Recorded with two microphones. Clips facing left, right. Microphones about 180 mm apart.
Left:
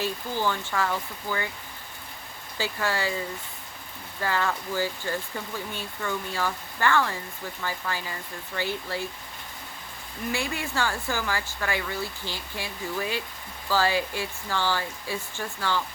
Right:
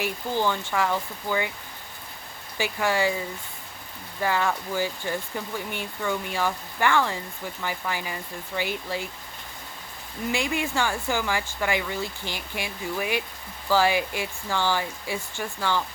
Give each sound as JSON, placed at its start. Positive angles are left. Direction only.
{"t": 0.0, "sound": "speech", "side_deg": -15}
{"t": 2.6, "sound": "speech", "side_deg": -15}
{"t": 4.2, "sound": "speech", "side_deg": -15}
{"t": 10.3, "sound": "speech", "side_deg": -15}